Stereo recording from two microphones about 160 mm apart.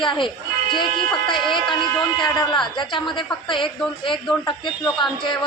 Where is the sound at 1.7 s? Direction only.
Centre (ahead or behind).